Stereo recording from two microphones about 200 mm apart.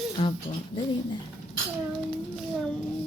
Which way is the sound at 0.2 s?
30° left (ahead or behind).